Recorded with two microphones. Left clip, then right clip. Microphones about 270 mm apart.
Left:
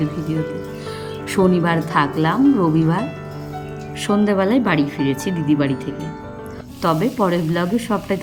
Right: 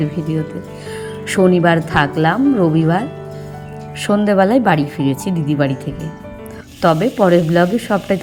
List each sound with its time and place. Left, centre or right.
1.3 s speech: centre
4.0 s speech: centre